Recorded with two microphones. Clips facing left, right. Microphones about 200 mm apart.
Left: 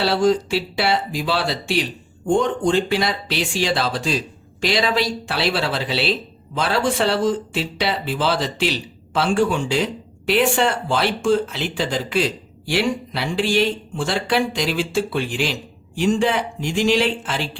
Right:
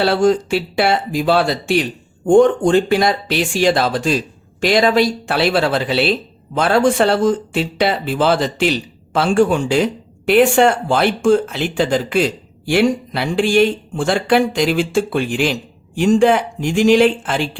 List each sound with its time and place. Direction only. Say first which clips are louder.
0.0 s speech: right 3 dB; 50° right (ahead or behind)